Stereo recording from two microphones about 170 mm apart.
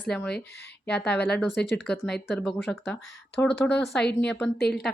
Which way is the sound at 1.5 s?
85° left.